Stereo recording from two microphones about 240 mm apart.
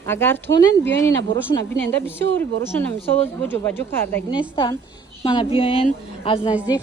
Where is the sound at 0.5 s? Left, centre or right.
Left.